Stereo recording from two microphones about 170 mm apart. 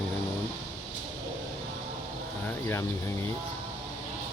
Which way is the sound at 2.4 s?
15° left (ahead or behind).